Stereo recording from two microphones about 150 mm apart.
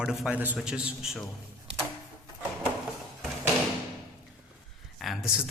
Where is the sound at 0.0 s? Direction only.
5° right (ahead or behind).